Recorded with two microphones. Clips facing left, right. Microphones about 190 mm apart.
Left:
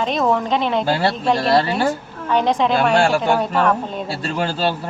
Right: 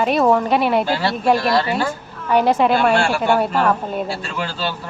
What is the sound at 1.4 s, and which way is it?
Speech, 30° left (ahead or behind).